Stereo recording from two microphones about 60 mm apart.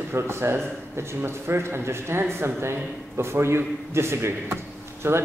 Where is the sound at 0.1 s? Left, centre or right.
Right.